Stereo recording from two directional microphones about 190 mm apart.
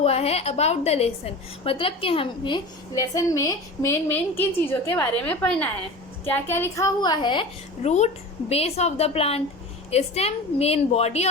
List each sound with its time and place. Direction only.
0.0 s a woman's voice: 35° left (ahead or behind)